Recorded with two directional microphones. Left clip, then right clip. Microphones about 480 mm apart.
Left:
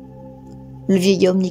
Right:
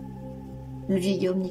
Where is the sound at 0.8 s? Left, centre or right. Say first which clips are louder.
Left 10 dB; centre.